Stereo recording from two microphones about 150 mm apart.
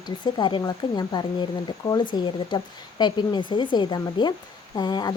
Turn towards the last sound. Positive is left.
turn(degrees=30)  # may be behind; listen again after turning